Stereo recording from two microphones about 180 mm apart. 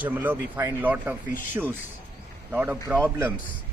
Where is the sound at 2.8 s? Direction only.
5° left (ahead or behind).